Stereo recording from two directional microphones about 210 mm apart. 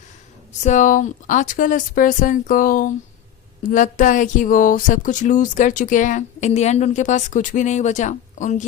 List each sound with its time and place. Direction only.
0.6 s speech: 35° left (ahead or behind)